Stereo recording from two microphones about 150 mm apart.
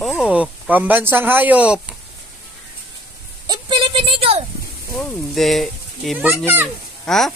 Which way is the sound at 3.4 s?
30° right (ahead or behind).